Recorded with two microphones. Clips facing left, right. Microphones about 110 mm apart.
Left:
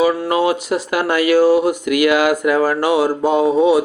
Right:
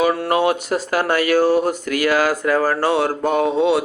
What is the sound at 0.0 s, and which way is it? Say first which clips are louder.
Speech: left 2 dB; 50° right (ahead or behind).